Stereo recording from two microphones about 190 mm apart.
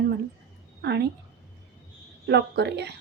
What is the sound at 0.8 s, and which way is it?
Speech, 60° right (ahead or behind).